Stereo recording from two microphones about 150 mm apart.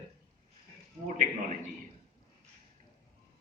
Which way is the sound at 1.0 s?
55° right (ahead or behind).